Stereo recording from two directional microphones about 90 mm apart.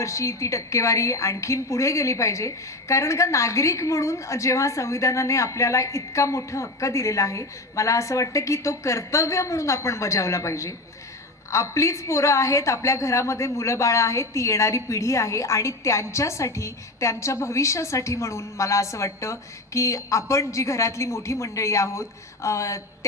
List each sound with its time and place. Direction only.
0.0 s a woman's voice: 35° left (ahead or behind)